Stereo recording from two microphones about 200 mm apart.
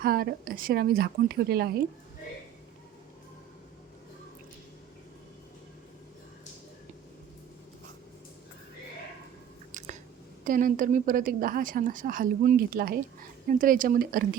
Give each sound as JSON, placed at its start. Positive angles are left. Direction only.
{"t": 0.0, "sound": "a woman's voice", "side_deg": -50}
{"t": 9.7, "sound": "chewing", "side_deg": -35}
{"t": 10.4, "sound": "a woman's voice", "side_deg": -40}